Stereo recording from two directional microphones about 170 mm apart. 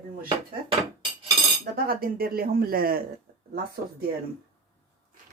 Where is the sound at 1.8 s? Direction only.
60° right (ahead or behind).